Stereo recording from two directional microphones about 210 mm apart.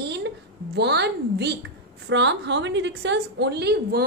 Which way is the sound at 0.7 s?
50° right (ahead or behind).